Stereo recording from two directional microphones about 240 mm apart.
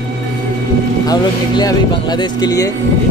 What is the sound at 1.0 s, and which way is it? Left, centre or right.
Speech, centre.